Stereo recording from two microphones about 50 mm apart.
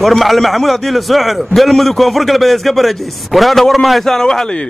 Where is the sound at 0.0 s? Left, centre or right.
Centre.